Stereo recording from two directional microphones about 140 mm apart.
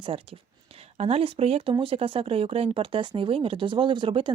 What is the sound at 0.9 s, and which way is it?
Speech, 45° right (ahead or behind).